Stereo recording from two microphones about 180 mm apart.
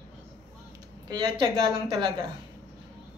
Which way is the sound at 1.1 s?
25° right (ahead or behind).